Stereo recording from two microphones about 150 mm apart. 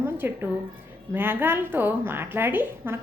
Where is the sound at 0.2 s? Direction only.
15° right (ahead or behind).